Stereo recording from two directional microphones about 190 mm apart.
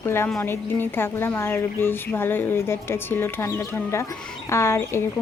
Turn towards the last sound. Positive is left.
turn(degrees=15)  # may be behind; listen again after turning